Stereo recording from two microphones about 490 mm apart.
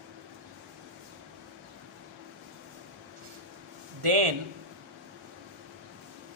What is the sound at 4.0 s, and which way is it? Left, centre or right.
Speech, right.